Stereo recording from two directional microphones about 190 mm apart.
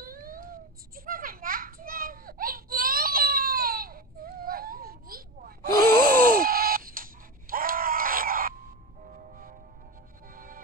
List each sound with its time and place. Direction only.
0.0 s children playing: 45° right (ahead or behind)
5.9 s gasp: 10° left (ahead or behind)
6.3 s a sound: 50° right (ahead or behind)
9.0 s music: 45° right (ahead or behind)